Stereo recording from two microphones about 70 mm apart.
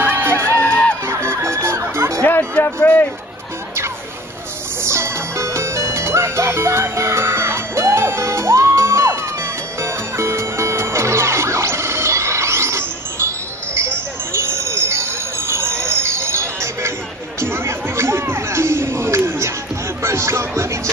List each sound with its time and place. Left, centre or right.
0.0 s music: right
0.6 s music: centre
1.0 s music: right
2.6 s speech: left
4.8 s music: right